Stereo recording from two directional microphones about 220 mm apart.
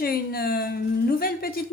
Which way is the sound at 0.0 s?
45° left (ahead or behind).